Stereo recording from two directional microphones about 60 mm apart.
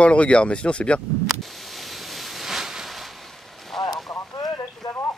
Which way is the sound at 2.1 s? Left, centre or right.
Centre.